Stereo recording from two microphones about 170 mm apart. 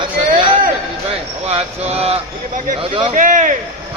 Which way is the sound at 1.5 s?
35° right (ahead or behind).